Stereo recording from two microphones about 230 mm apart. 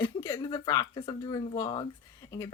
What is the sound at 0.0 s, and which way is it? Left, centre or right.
Speech, centre.